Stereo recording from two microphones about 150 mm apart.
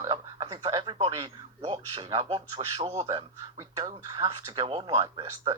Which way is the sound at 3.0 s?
45° right (ahead or behind).